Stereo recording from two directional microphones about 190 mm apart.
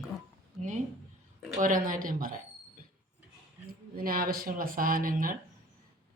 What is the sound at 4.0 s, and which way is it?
Speech, 50° right (ahead or behind).